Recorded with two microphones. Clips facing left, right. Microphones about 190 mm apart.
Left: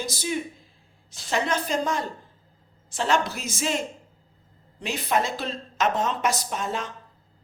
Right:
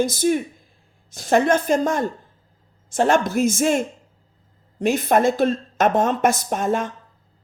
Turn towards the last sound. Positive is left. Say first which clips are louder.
# right 8 dB
turn(degrees=-50)  # may be behind; listen again after turning